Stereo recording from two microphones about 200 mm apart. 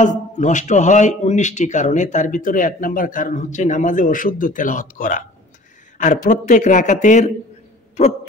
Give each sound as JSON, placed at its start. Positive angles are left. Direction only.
{"t": 0.0, "sound": "a man's voice", "side_deg": 35}